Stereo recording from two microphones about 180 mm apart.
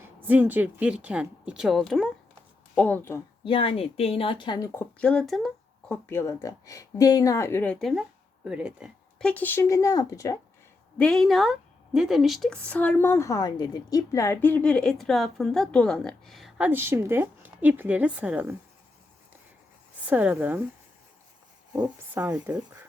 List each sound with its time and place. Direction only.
0.0 s speech: 10° right (ahead or behind); by 3.2 s 10° left (ahead or behind)
3.4 s a woman's voice: 30° left (ahead or behind); by 5.5 s centre (ahead or behind)
5.9 s speech: 15° left (ahead or behind)
10.9 s speech: 5° left (ahead or behind)
20.1 s speech: 10° right (ahead or behind)
21.7 s speech: 15° right (ahead or behind)